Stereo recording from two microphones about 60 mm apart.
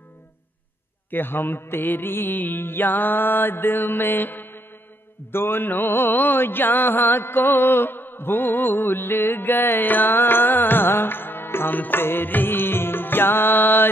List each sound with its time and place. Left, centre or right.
1.1 s mantra: left